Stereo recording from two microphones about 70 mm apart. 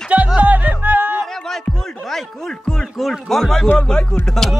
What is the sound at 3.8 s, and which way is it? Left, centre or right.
Speech, centre.